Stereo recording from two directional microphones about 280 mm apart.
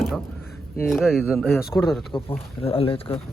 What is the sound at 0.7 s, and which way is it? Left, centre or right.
Speech, centre.